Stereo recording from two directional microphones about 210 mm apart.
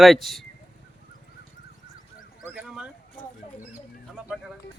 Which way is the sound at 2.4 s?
5° right (ahead or behind).